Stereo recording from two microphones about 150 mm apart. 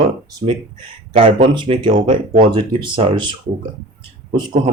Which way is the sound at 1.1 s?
40° right (ahead or behind).